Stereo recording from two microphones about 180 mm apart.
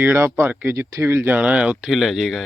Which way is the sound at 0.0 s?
10° right (ahead or behind).